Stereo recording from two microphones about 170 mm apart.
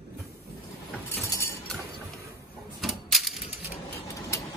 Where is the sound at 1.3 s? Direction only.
15° left (ahead or behind).